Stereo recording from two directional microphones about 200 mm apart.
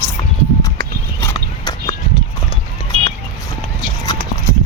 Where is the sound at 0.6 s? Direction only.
15° left (ahead or behind).